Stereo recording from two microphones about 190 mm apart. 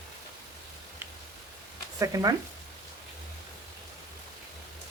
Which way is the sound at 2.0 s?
20° right (ahead or behind).